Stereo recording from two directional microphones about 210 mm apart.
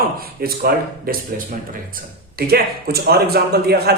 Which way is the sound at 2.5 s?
50° right (ahead or behind).